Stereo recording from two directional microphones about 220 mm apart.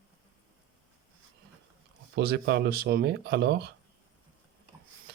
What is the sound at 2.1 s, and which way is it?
Speech, 45° right (ahead or behind).